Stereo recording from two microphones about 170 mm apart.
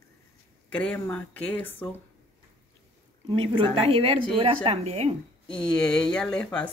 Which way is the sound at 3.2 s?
30° right (ahead or behind).